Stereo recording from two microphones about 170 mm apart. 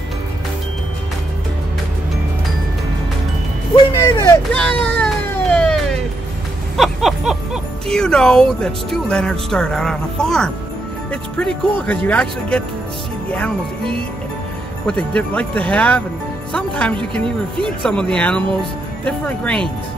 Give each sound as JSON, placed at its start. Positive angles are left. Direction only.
{"t": 3.7, "sound": "speech", "side_deg": 20}
{"t": 4.6, "sound": "music", "side_deg": 5}
{"t": 8.9, "sound": "speech", "side_deg": 5}